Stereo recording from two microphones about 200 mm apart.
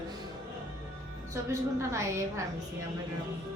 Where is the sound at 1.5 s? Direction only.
15° right (ahead or behind).